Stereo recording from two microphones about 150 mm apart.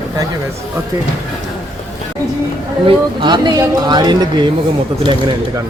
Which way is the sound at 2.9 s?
30° right (ahead or behind).